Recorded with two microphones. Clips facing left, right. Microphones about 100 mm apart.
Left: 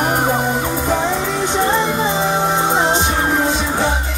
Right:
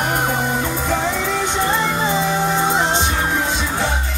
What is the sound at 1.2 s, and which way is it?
Music, 30° left (ahead or behind).